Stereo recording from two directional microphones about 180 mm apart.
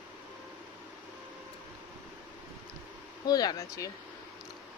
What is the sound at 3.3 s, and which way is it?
Speech, 20° left (ahead or behind).